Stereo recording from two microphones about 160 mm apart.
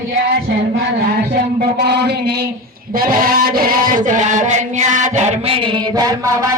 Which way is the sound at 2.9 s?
65° right (ahead or behind).